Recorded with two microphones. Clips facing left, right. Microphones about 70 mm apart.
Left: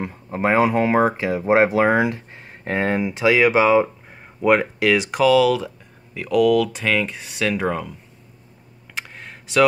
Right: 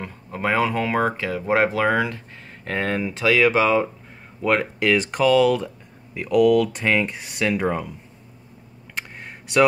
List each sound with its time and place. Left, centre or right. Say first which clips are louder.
0.0 s speech: left 4 dB; left; by 7.9 s centre
8.9 s computer keyboard: even; centre